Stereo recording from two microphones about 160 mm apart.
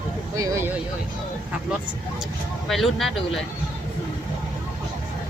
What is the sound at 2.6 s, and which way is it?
Speech, centre (ahead or behind).